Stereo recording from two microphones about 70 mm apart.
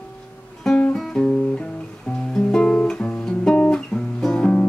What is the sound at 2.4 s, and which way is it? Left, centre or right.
Guitar, centre.